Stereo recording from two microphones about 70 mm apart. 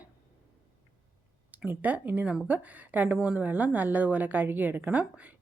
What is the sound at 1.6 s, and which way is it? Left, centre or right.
A woman's voice, right.